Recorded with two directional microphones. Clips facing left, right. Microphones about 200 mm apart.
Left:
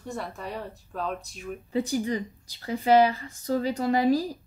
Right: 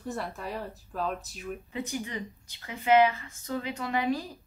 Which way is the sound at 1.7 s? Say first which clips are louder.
Left 10 dB; 35° left (ahead or behind).